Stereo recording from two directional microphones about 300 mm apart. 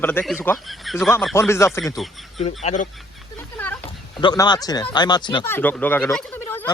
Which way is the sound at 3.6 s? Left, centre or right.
Centre.